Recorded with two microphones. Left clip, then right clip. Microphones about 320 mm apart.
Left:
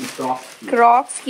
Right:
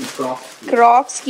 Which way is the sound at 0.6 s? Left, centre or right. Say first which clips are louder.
Right 2 dB; centre.